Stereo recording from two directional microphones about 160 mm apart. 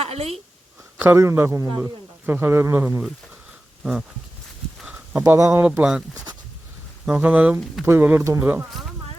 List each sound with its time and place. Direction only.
0.0 s a woman's voice: 40° right (ahead or behind)
0.9 s a man's voice: 15° right (ahead or behind)
4.8 s a sound: 5° right (ahead or behind)
5.1 s a man's voice: 20° right (ahead or behind)
7.0 s a man's voice: 5° right (ahead or behind)